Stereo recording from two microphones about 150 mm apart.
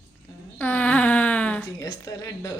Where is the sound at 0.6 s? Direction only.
10° left (ahead or behind).